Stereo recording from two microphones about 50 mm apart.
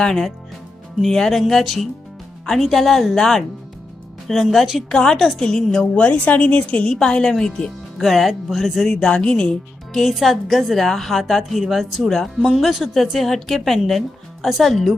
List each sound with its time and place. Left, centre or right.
0.0 s speech: centre
4.9 s speech: centre
5.1 s a woman's voice: centre
7.9 s speech: centre
9.0 s a woman's voice: centre
9.9 s speech: centre